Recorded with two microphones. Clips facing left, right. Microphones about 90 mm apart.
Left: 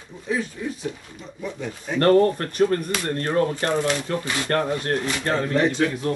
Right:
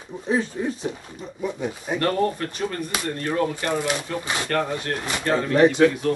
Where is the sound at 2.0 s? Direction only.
45° left (ahead or behind).